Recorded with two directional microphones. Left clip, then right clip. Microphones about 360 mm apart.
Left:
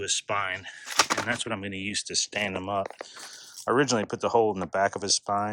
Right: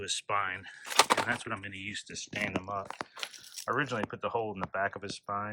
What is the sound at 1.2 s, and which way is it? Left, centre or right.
Speech, centre.